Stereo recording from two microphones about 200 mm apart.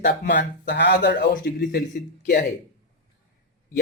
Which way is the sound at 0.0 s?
60° left (ahead or behind).